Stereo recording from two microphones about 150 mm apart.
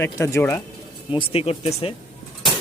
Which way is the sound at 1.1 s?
35° left (ahead or behind).